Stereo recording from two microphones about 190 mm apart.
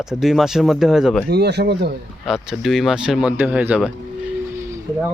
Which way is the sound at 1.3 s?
60° right (ahead or behind).